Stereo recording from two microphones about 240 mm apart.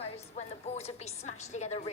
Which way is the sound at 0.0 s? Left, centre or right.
Left.